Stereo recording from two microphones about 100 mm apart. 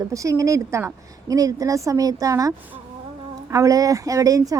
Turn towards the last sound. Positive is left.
turn(degrees=-35)  # may be behind; listen again after turning